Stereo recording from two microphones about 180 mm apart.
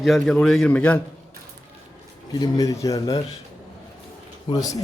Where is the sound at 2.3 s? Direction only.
20° left (ahead or behind).